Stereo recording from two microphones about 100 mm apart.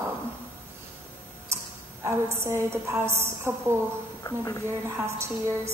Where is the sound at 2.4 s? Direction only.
25° right (ahead or behind).